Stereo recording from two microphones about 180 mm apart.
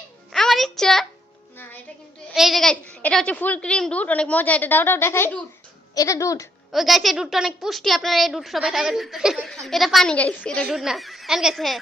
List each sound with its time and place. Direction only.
0.3 s music: centre (ahead or behind)
2.3 s a woman's voice: centre (ahead or behind); by 6.5 s 20° left (ahead or behind)
6.7 s a woman's voice: centre (ahead or behind)